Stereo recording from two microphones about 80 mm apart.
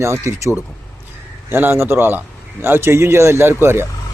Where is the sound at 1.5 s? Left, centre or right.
Right.